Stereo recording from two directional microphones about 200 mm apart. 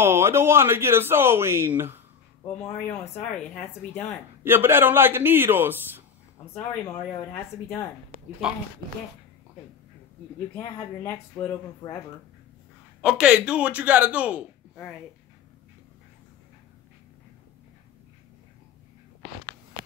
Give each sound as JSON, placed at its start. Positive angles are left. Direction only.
{"t": 0.0, "sound": "speech", "side_deg": -10}
{"t": 2.5, "sound": "speech", "side_deg": 5}
{"t": 4.4, "sound": "speech", "side_deg": -10}
{"t": 6.5, "sound": "speech", "side_deg": 10}
{"t": 10.6, "sound": "speech", "side_deg": 20}
{"t": 13.0, "sound": "speech", "side_deg": -5}